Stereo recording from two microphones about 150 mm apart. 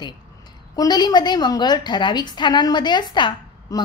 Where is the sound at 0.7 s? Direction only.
30° left (ahead or behind).